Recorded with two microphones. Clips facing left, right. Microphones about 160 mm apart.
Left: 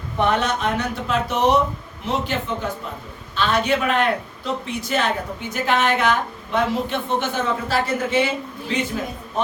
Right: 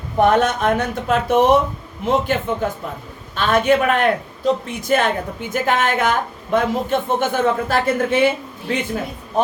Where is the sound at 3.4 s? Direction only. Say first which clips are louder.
Right 4 dB; 50° right (ahead or behind).